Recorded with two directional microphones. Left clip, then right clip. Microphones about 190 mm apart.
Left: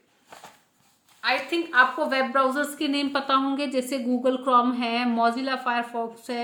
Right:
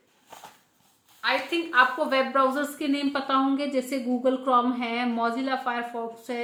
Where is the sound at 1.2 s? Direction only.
20° left (ahead or behind).